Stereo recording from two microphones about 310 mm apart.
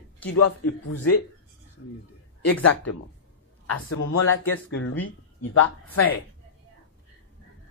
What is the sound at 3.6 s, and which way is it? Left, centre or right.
Speech, left.